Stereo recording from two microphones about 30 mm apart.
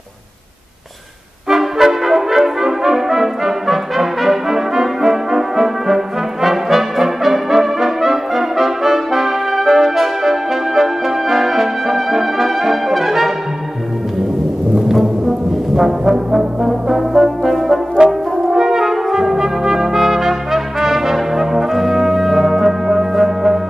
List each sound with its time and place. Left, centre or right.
1.5 s brass instrument: centre
15.8 s brass instrument: centre
18.0 s french horn: right
18.6 s trumpet: centre
22.4 s music: centre